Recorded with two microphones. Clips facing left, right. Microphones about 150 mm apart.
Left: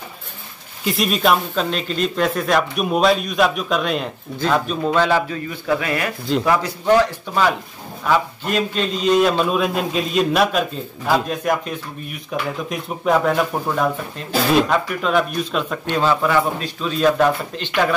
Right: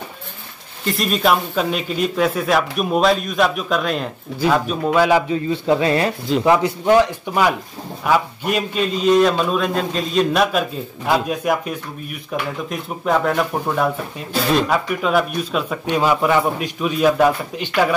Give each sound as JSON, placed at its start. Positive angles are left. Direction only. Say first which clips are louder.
{"t": 0.8, "sound": "speech", "louder": "even", "side_deg": 0}
{"t": 5.5, "sound": "speech", "louder": "right 5 dB", "side_deg": -30}